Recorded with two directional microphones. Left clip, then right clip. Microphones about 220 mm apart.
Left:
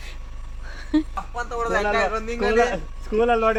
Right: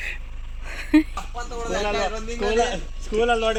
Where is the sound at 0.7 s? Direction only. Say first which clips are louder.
Right 4 dB; 30° right (ahead or behind).